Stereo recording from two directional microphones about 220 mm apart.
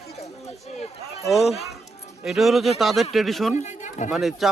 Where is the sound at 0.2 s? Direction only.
30° left (ahead or behind).